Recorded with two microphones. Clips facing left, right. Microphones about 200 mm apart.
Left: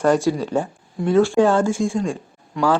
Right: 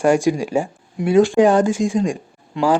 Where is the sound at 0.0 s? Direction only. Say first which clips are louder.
Right 2 dB; 10° right (ahead or behind).